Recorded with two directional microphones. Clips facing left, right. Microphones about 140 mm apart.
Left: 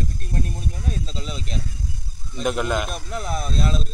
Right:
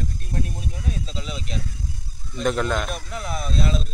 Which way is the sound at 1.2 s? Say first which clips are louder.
Even; 40° left (ahead or behind).